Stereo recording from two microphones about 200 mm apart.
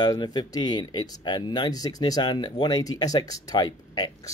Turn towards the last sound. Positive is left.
turn(degrees=20)  # may be behind; listen again after turning